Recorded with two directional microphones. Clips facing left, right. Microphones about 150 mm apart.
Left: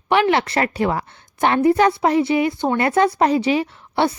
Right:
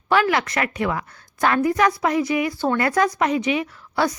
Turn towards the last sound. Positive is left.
turn(degrees=25)  # may be behind; listen again after turning